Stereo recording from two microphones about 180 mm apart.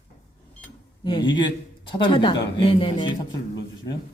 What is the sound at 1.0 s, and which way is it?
Speech, 25° left (ahead or behind).